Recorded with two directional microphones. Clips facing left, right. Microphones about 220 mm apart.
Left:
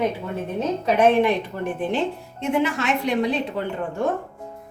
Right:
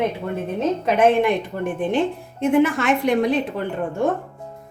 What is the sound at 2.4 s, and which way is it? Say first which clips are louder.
Speech: right 5 dB; 55° right (ahead or behind).